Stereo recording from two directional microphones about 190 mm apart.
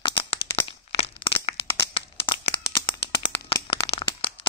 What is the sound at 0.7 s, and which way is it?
Crack, 30° left (ahead or behind).